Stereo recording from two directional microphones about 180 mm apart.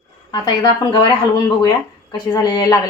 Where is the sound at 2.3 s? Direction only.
25° left (ahead or behind).